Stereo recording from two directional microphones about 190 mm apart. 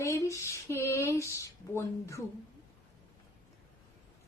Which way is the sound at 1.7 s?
15° left (ahead or behind).